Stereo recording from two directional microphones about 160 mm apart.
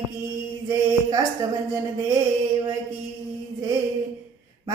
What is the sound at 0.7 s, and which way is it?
Speech, 20° right (ahead or behind).